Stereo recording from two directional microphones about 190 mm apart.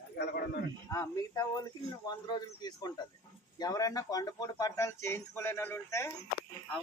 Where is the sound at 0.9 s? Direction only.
15° left (ahead or behind).